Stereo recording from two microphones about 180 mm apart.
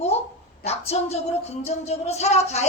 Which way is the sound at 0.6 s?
35° left (ahead or behind).